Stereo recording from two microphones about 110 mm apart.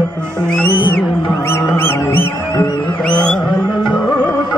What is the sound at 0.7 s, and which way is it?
Music, 45° left (ahead or behind).